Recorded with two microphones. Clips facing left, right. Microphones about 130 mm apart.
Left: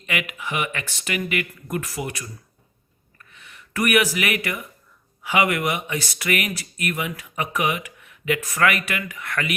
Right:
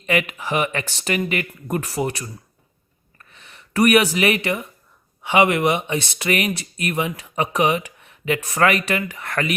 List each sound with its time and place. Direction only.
0.0 s speech: 35° right (ahead or behind)
3.2 s a sound: 35° right (ahead or behind)
5.2 s speech: 25° right (ahead or behind)